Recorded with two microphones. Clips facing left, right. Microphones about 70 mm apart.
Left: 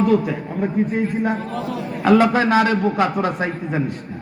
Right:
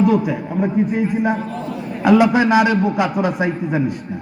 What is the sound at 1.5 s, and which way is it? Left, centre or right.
Speech, left.